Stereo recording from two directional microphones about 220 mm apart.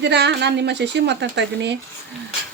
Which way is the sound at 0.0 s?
50° right (ahead or behind).